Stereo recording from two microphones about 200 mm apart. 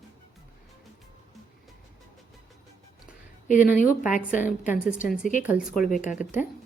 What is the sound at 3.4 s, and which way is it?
Speech, 40° left (ahead or behind).